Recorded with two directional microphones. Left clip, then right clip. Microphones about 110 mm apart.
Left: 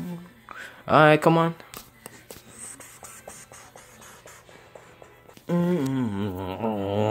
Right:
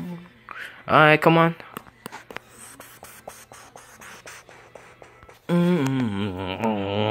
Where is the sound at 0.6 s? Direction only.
20° left (ahead or behind).